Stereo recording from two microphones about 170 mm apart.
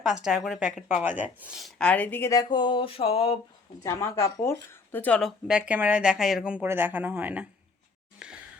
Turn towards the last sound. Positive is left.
turn(degrees=-10)  # may be behind; listen again after turning